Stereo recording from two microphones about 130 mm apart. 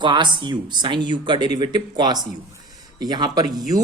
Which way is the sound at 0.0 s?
35° right (ahead or behind).